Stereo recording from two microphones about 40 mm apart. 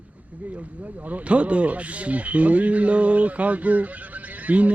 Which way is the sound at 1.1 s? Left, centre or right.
Right.